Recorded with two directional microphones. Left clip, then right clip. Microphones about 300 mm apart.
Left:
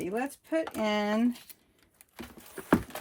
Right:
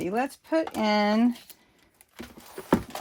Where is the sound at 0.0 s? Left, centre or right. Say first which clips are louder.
Right 5 dB; right.